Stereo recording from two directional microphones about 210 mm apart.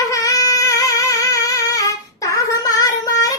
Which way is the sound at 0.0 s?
15° left (ahead or behind).